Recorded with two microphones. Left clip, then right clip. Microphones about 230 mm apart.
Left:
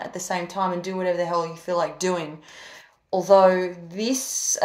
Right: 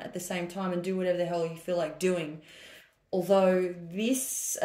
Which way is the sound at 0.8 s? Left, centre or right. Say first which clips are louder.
Left 4 dB; left.